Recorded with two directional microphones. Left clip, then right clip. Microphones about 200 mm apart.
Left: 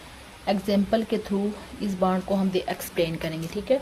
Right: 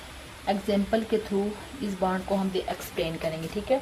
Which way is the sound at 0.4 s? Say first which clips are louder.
Left 2 dB; 60° left (ahead or behind).